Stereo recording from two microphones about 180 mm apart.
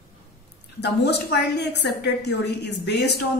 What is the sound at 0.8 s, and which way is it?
A woman's voice, 65° left (ahead or behind).